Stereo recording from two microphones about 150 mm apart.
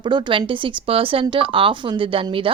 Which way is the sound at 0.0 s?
30° right (ahead or behind).